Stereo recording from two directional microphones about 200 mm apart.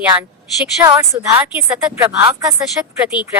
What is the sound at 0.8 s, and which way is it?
Speech, 15° right (ahead or behind).